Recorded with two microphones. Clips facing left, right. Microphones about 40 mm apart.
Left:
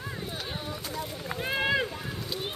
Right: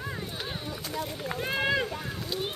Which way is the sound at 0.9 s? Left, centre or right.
Centre.